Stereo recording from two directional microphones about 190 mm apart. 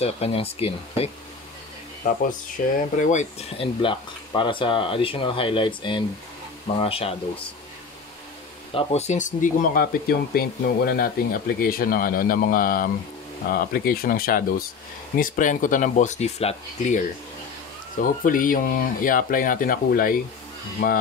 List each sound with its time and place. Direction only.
0.0 s speech: 30° left (ahead or behind)
2.8 s speech: 40° left (ahead or behind)
8.7 s speech: 35° left (ahead or behind)